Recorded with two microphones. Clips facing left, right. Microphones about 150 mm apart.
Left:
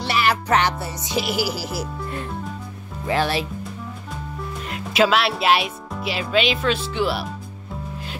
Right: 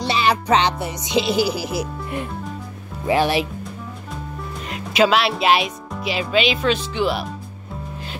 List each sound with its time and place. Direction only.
0.0 s music: 20° right (ahead or behind)
3.1 s speech: 15° right (ahead or behind)
4.6 s speech: centre (ahead or behind)